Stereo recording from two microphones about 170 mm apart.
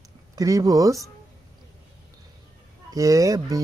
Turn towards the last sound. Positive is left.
turn(degrees=-20)  # may be behind; listen again after turning